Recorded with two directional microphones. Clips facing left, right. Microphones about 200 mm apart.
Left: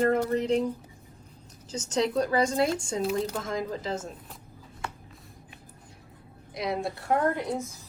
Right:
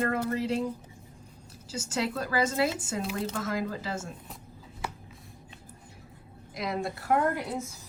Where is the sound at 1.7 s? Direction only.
10° right (ahead or behind).